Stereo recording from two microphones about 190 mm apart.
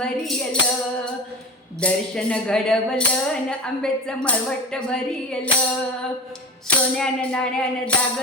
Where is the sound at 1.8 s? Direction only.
5° left (ahead or behind).